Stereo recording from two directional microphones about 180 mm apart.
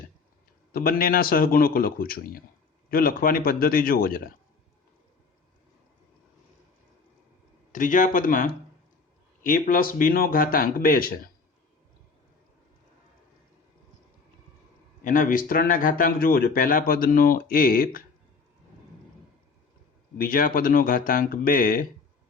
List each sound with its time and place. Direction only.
0.7 s a man's voice: 55° left (ahead or behind)
7.7 s speech: 45° left (ahead or behind)
15.0 s speech: 50° left (ahead or behind)
20.1 s speech: 55° left (ahead or behind)